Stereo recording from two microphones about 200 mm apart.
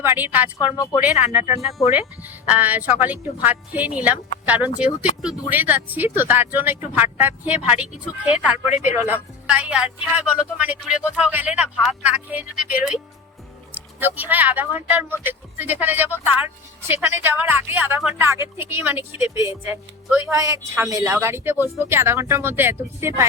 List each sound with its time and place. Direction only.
0.0 s speech: 10° right (ahead or behind)
0.6 s speech: 20° left (ahead or behind)
1.9 s speech: 10° right (ahead or behind)